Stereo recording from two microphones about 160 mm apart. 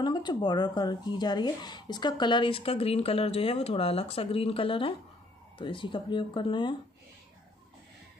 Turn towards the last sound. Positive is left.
turn(degrees=30)  # may be behind; listen again after turning